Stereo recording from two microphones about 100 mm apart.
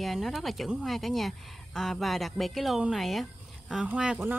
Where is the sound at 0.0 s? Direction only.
Centre (ahead or behind).